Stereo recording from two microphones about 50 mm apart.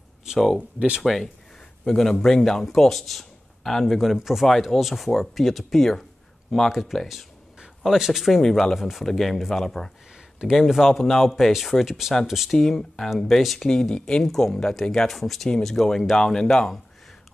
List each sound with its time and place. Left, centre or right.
0.6 s speech: right
1.0 s speech: centre
8.4 s speech: centre
8.7 s speech: centre
9.0 s speech: centre
10.4 s speech: centre
10.9 s speech: centre
12.5 s speech: centre
13.7 s speech: centre
14.2 s speech: centre